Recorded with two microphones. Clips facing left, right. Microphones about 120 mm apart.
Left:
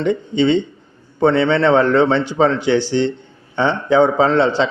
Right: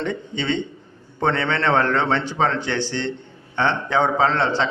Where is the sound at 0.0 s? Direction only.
15° left (ahead or behind).